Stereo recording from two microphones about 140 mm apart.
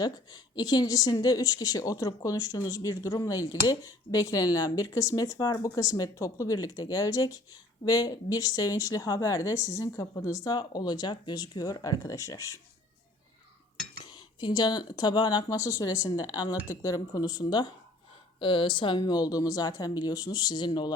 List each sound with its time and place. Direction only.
0.0 s speech: 30° left (ahead or behind)
14.0 s speech: 30° left (ahead or behind)